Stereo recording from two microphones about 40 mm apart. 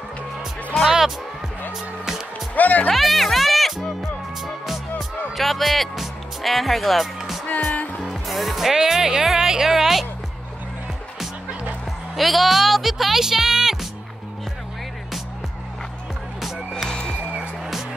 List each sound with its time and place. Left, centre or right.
0.8 s music: centre
2.5 s speech: left
2.9 s music: centre
5.3 s speech: centre
7.2 s music: centre
8.1 s speech: centre
12.2 s speech: centre
16.9 s music: left